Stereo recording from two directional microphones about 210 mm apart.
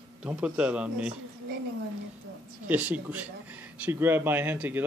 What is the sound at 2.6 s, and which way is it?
Speech, 10° right (ahead or behind).